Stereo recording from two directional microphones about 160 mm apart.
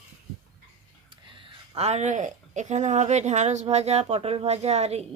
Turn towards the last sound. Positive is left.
turn(degrees=-40)  # may be behind; listen again after turning